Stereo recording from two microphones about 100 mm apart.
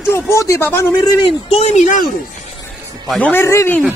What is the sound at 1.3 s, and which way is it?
Speech, 85° left.